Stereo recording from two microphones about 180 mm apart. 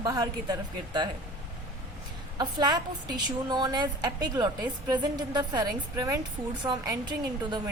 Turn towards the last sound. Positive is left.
turn(degrees=-25)  # may be behind; listen again after turning